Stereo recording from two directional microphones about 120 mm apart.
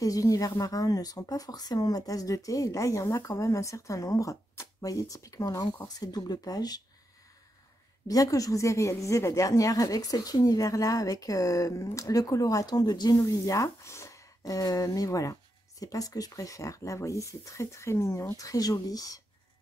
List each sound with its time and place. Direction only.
0.0 s a woman's voice: 30° left (ahead or behind)
8.1 s a woman's voice: 30° left (ahead or behind)